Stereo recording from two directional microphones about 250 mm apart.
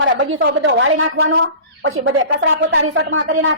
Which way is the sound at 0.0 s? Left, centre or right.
Right.